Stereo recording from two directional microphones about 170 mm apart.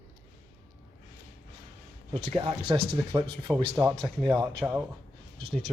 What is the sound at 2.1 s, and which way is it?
A man's voice, 35° right (ahead or behind).